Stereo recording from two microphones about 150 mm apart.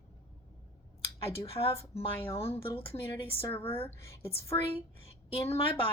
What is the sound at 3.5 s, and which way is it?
A woman's voice, 15° left (ahead or behind).